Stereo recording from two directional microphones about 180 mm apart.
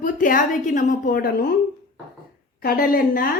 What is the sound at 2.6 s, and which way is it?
Speech, 55° left (ahead or behind).